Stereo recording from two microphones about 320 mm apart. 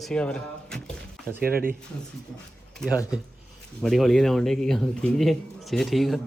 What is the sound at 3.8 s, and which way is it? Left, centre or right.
A man's voice, centre.